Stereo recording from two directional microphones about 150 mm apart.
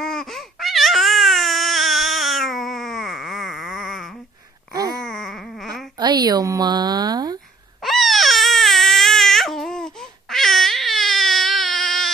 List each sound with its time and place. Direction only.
0.0 s babbling: 5° left (ahead or behind)
5.0 s a sound: centre (ahead or behind)
5.9 s a woman's voice: 30° right (ahead or behind)
7.8 s baby cry: centre (ahead or behind)